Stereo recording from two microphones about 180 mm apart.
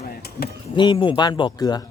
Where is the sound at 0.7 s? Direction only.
25° left (ahead or behind).